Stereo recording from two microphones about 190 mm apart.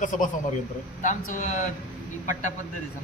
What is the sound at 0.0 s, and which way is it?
A man's voice, 40° left (ahead or behind).